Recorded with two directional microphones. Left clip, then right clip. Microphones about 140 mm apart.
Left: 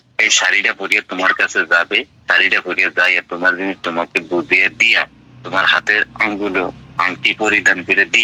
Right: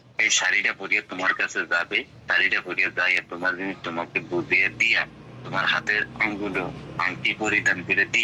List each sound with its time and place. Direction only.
0.2 s speech: 50° left (ahead or behind)